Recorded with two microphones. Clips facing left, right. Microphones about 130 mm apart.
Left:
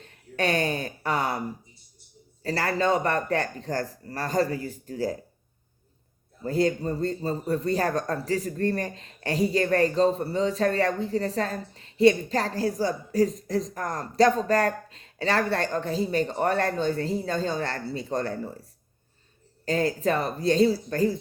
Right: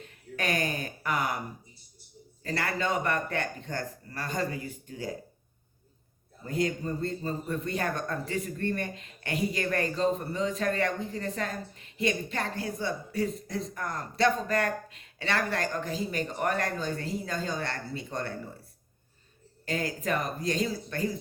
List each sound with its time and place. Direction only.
0.0 s speech: 30° left (ahead or behind)
2.4 s a man's voice: 35° left (ahead or behind)
6.4 s a man's voice: 35° left (ahead or behind)
19.6 s a man's voice: 35° left (ahead or behind)